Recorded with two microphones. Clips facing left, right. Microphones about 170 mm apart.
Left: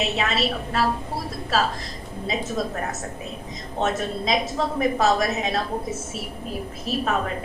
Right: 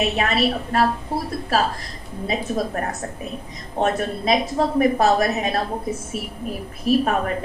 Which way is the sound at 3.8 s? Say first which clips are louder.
Right 3 dB; 55° right (ahead or behind).